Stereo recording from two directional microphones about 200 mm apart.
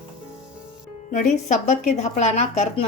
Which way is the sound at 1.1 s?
40° left (ahead or behind).